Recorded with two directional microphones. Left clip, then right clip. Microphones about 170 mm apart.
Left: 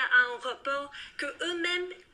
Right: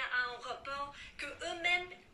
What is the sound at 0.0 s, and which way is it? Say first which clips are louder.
Speech: left 11 dB; 50° left (ahead or behind).